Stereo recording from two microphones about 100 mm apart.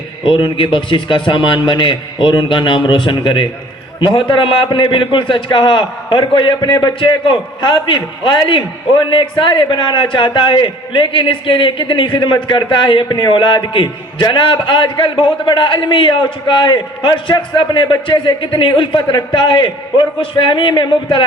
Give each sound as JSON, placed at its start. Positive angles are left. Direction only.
{"t": 0.2, "sound": "a man's voice", "side_deg": 55}